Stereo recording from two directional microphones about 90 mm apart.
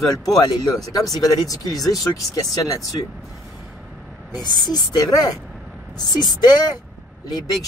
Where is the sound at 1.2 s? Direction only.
45° left (ahead or behind).